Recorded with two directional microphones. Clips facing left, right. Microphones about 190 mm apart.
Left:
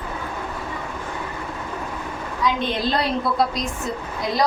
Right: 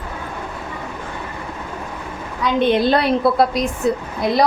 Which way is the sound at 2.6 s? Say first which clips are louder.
Right 7 dB; 60° right (ahead or behind).